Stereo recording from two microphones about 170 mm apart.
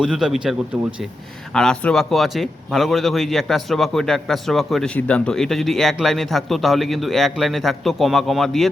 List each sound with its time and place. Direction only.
0.0 s speech: 5° right (ahead or behind)
1.5 s speech: 5° left (ahead or behind)